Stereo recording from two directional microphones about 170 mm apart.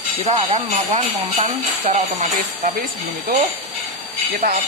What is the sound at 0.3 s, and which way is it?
Speech, 35° right (ahead or behind).